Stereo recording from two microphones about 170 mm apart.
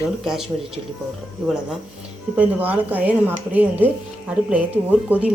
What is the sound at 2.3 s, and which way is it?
Speech, 10° right (ahead or behind).